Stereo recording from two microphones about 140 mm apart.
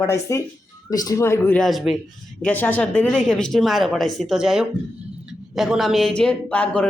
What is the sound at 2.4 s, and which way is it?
Speech, 15° left (ahead or behind).